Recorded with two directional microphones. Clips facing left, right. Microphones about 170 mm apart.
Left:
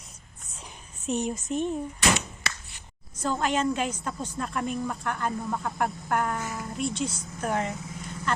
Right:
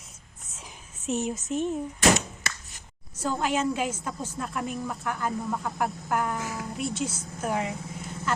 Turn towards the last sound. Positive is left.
turn(degrees=-10)  # may be behind; listen again after turning